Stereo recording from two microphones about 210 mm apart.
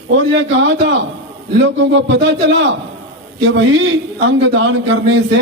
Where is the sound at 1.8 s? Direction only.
60° right (ahead or behind).